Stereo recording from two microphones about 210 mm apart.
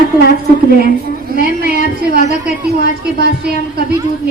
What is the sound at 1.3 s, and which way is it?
Speech, 45° right (ahead or behind).